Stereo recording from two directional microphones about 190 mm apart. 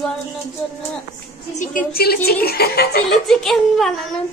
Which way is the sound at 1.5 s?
45° left (ahead or behind).